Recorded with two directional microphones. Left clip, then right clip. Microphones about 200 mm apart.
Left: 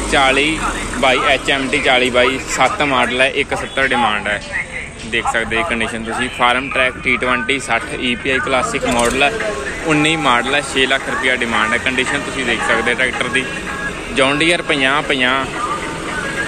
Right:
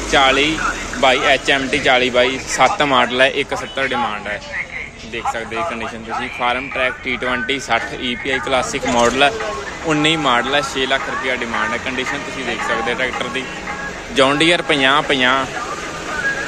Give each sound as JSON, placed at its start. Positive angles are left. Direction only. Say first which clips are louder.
{"t": 0.1, "sound": "speech", "louder": "even", "side_deg": -15}
{"t": 3.8, "sound": "speech", "louder": "left 6 dB", "side_deg": -10}
{"t": 14.1, "sound": "speech", "louder": "right 1 dB", "side_deg": -25}